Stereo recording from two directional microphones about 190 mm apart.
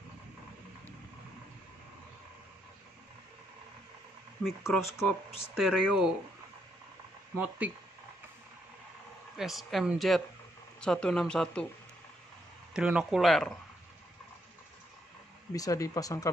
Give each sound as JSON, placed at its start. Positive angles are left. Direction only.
{"t": 4.5, "sound": "speech", "side_deg": 0}
{"t": 7.3, "sound": "speech", "side_deg": -10}
{"t": 9.4, "sound": "speech", "side_deg": 0}
{"t": 12.7, "sound": "speech", "side_deg": -5}
{"t": 15.5, "sound": "speech", "side_deg": 20}